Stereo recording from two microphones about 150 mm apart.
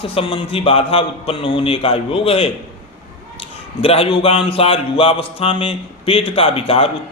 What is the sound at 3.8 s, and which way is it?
Music, 40° left (ahead or behind).